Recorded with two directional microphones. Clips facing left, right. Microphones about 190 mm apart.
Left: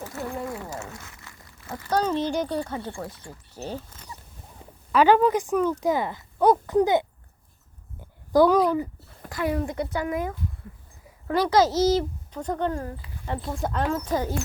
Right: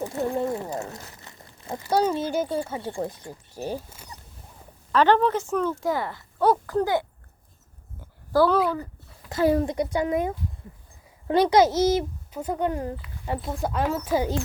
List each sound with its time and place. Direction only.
0.1 s a sound: 25° right (ahead or behind)
0.8 s a sound: 35° right (ahead or behind)
1.2 s speech: 20° right (ahead or behind)
4.9 s speech: 10° left (ahead or behind)
8.3 s speech: 15° left (ahead or behind)
9.3 s speech: 30° right (ahead or behind)
9.6 s a woman's voice: 15° right (ahead or behind)
11.9 s speech: 10° right (ahead or behind)
13.4 s speech: centre (ahead or behind)